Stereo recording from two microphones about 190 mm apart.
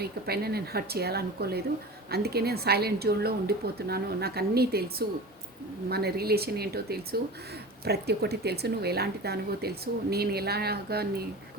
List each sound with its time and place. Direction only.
0.0 s speech: 55° right (ahead or behind)